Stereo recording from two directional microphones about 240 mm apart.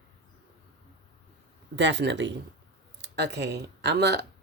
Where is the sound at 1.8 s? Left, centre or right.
Right.